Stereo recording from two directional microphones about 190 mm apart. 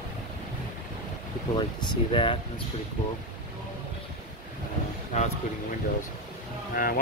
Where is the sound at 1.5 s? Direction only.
25° left (ahead or behind).